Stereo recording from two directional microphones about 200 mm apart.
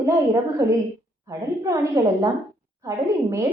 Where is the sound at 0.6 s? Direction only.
15° right (ahead or behind).